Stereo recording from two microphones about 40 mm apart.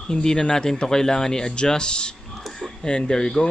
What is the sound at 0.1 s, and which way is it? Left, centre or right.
Speech, centre.